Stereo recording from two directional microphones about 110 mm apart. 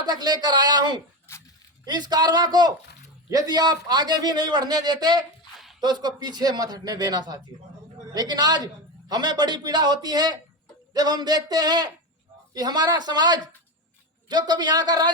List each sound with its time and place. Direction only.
0.0 s a man's voice: 40° right (ahead or behind)